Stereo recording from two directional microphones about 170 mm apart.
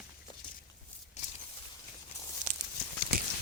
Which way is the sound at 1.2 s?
40° left (ahead or behind).